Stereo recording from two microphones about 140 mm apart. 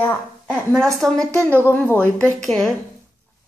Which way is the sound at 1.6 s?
15° left (ahead or behind).